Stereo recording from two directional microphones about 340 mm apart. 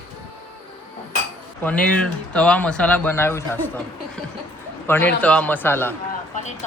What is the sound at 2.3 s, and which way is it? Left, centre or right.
Speech, centre.